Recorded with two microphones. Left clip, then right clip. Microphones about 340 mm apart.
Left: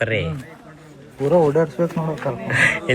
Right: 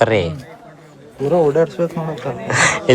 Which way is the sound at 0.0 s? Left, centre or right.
Centre.